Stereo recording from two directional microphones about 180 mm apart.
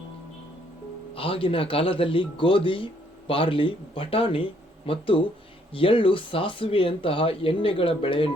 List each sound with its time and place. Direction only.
1.1 s speech: 30° left (ahead or behind)